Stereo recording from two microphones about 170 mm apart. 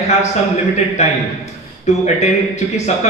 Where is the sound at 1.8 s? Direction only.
40° left (ahead or behind).